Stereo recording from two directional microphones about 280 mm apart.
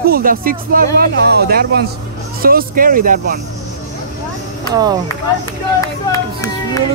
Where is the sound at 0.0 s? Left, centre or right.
Right.